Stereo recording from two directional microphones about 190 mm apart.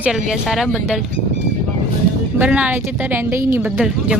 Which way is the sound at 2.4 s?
5° right (ahead or behind).